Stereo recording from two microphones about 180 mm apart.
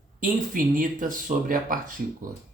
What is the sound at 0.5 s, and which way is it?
Speech, 50° right (ahead or behind).